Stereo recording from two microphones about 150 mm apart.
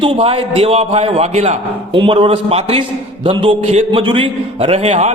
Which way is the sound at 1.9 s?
35° right (ahead or behind).